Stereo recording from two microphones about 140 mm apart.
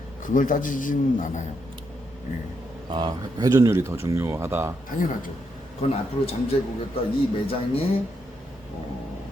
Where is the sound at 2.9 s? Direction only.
30° right (ahead or behind).